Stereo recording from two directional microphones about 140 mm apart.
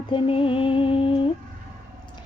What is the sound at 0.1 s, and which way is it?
Music, 40° left (ahead or behind).